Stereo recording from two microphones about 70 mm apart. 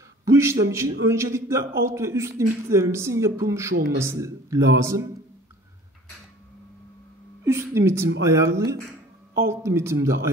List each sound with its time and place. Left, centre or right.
0.2 s a man's voice: right
7.4 s a man's voice: right